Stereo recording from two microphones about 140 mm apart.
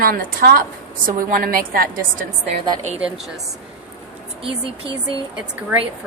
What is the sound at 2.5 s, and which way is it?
Speech, 50° right (ahead or behind).